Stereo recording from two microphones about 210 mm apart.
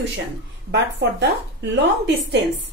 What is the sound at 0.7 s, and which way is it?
Speech, 55° right (ahead or behind).